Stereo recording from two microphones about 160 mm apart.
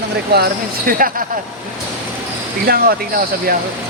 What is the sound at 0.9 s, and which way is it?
Speech, 60° right (ahead or behind).